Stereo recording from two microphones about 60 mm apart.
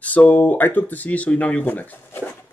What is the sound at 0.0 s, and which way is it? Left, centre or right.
Speech, left.